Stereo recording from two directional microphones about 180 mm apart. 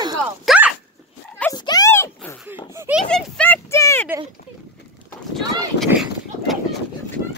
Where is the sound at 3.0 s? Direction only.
5° left (ahead or behind).